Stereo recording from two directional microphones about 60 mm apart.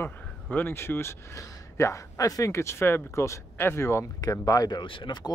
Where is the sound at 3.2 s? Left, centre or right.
Left.